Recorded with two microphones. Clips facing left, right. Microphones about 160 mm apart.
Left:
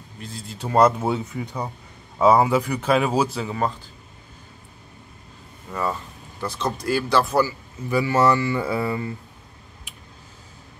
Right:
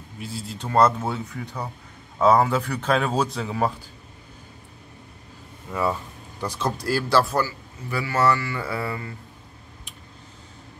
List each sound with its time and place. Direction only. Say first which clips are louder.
0.2 s speech: right 3 dB; 5° right (ahead or behind)
0.6 s speech: left 2 dB; 10° left (ahead or behind)
5.7 s speech: right 1 dB; 10° right (ahead or behind)
7.3 s speech: left 4 dB; 15° left (ahead or behind)